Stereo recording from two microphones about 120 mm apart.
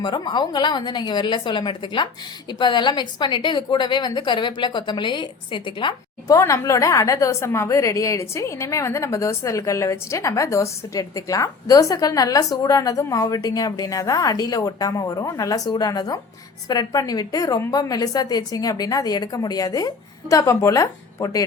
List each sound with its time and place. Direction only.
0.0 s a woman's voice: 40° left (ahead or behind)
6.3 s a woman's voice: 25° left (ahead or behind)